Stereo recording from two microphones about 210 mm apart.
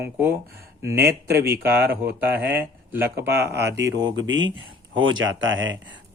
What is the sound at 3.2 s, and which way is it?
Speech, 50° right (ahead or behind).